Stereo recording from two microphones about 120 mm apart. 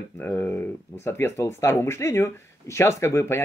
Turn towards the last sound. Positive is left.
turn(degrees=20)  # may be behind; listen again after turning